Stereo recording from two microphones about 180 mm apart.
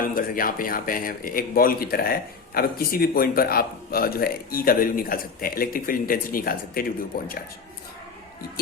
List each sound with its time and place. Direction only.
0.0 s a man's voice: 50° left (ahead or behind)